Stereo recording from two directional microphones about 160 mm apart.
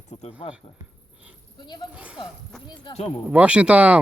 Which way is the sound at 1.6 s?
25° left (ahead or behind).